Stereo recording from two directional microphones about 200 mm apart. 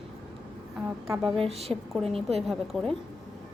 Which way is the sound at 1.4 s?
30° right (ahead or behind).